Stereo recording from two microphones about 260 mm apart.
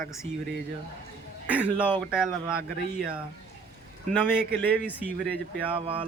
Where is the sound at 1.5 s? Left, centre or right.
Centre.